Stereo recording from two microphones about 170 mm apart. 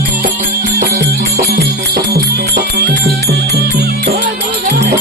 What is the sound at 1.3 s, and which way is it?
Music, 60° right (ahead or behind).